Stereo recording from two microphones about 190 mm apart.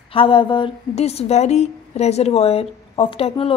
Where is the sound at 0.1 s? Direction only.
30° left (ahead or behind).